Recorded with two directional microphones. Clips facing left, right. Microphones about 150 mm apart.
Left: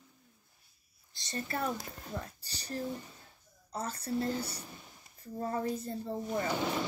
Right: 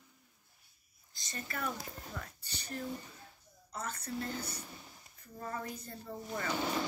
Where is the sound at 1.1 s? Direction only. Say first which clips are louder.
Left 6 dB; 35° left (ahead or behind).